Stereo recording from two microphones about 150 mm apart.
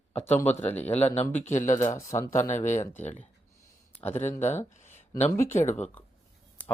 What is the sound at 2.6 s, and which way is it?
Speech, 55° left (ahead or behind).